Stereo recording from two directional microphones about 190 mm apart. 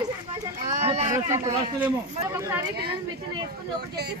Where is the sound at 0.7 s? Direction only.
35° right (ahead or behind).